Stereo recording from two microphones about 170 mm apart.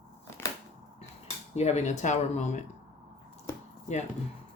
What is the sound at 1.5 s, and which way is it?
Speech, 40° left (ahead or behind).